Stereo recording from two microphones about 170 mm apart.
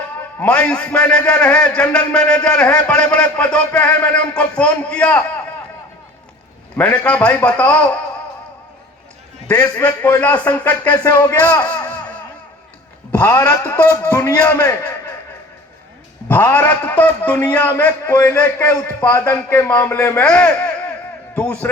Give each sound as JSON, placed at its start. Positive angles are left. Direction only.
{"t": 0.3, "sound": "speech", "side_deg": 5}
{"t": 6.7, "sound": "speech", "side_deg": 10}
{"t": 9.6, "sound": "speech", "side_deg": 10}
{"t": 13.1, "sound": "speech", "side_deg": 15}
{"t": 16.3, "sound": "speech", "side_deg": 10}